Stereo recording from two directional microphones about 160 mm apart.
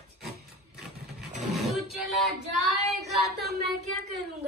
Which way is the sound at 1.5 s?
Centre (ahead or behind).